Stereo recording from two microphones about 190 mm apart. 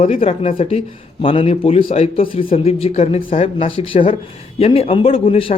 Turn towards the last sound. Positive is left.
turn(degrees=30)  # may be behind; listen again after turning